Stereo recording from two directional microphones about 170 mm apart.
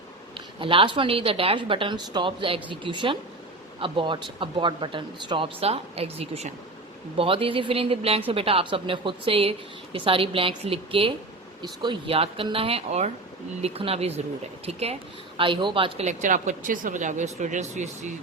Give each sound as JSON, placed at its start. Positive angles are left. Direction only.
{"t": 0.6, "sound": "a woman's voice", "side_deg": -30}
{"t": 16.0, "sound": "speech", "side_deg": -45}